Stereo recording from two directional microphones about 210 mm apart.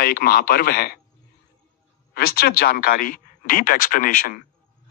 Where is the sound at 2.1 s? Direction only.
45° left (ahead or behind).